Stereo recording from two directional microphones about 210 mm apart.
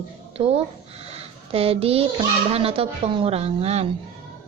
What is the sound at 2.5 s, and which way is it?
Speech, 30° right (ahead or behind).